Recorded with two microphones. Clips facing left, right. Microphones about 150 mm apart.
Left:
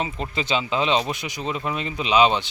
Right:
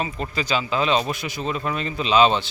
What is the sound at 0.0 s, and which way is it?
Speech, 20° left (ahead or behind).